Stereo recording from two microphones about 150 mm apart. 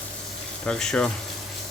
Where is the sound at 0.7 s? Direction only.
5° left (ahead or behind).